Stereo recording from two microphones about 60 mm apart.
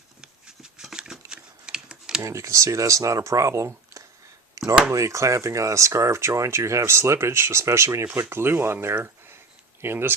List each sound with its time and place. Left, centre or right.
0.2 s scissors: centre
2.2 s speech: right
4.6 s a sound: right
4.9 s speech: right
8.1 s speech: right